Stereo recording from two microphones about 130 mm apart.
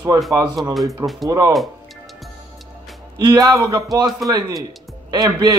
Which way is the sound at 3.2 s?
30° right (ahead or behind).